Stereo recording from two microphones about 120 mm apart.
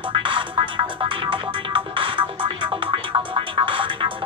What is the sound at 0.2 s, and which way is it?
Music, 45° right (ahead or behind).